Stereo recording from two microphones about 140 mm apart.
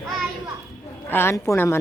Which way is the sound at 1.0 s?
15° left (ahead or behind).